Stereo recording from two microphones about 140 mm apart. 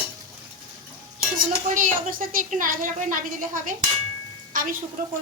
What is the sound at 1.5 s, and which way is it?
Speech, 85° right.